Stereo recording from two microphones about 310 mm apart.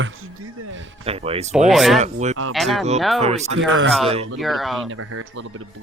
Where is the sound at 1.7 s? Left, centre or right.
Centre.